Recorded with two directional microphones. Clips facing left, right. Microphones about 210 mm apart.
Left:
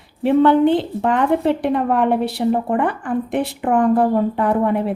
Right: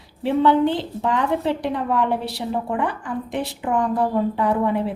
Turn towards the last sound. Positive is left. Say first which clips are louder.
# left 3 dB
turn(degrees=55)  # may be behind; listen again after turning